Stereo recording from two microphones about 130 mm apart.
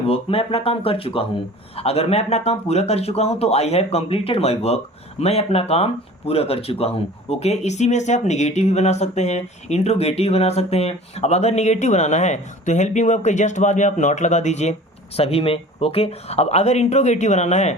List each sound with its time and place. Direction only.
0.1 s speech: 45° left (ahead or behind)